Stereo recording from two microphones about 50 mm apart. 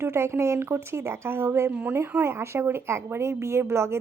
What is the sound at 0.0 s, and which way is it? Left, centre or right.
Speech, right.